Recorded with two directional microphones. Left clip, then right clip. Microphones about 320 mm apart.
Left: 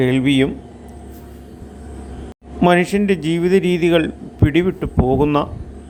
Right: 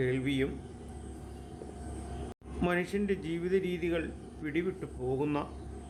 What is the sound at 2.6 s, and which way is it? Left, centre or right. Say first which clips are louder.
A man's voice: left 17 dB; left.